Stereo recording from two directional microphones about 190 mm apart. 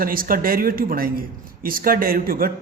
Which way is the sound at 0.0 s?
50° right (ahead or behind).